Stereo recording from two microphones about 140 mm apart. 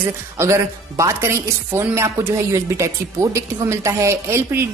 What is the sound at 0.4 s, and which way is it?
Speech, 20° right (ahead or behind).